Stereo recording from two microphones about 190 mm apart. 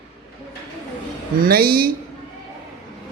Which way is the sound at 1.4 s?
50° right (ahead or behind).